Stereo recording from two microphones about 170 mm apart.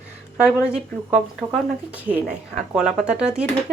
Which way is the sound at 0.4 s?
5° right (ahead or behind).